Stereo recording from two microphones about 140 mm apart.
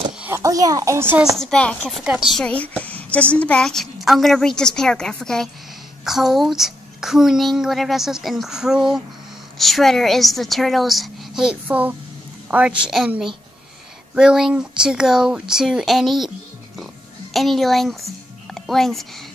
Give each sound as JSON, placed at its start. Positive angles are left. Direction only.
{"t": 0.2, "sound": "a child's voice", "side_deg": -20}
{"t": 1.2, "sound": "a woman's voice", "side_deg": 0}
{"t": 16.7, "sound": "oink", "side_deg": 0}
{"t": 18.5, "sound": "speech", "side_deg": 0}